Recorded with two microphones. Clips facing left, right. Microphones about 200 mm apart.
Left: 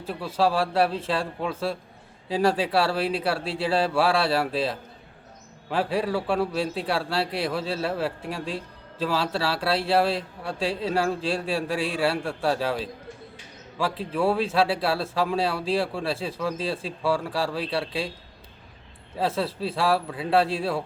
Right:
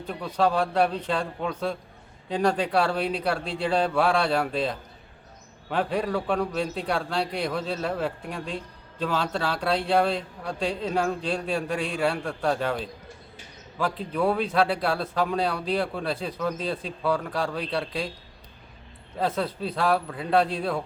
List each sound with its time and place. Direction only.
0.0 s a man's voice: 5° left (ahead or behind)
19.5 s speech: 30° left (ahead or behind)
19.7 s a man's voice: 5° left (ahead or behind)